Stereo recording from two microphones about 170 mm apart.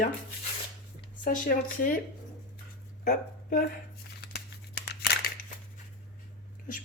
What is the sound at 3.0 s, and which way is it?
Speech, 50° left (ahead or behind).